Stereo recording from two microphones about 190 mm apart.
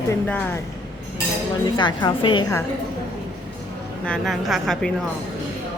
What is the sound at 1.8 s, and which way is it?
Speech, 25° left (ahead or behind).